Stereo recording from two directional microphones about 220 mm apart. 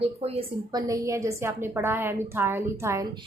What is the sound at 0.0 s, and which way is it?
A woman's voice, 25° right (ahead or behind).